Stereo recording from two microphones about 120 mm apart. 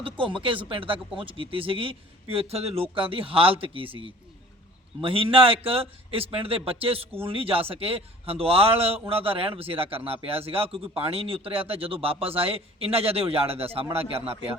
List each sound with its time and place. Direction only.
0.0 s a man's voice: 45° right (ahead or behind)